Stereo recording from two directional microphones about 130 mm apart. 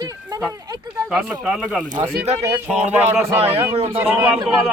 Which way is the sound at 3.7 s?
50° right (ahead or behind).